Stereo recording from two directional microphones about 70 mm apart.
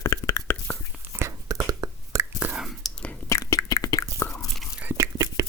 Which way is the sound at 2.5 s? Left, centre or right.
Centre.